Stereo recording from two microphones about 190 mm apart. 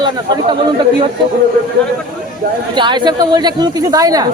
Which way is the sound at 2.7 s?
25° right (ahead or behind).